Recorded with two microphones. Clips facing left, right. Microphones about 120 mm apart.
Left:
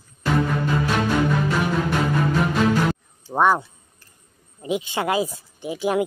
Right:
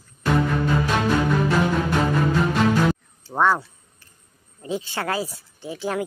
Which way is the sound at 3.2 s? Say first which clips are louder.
Left 2 dB; 15° left (ahead or behind).